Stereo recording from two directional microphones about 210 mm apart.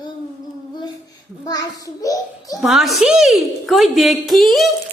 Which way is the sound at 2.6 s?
Centre (ahead or behind).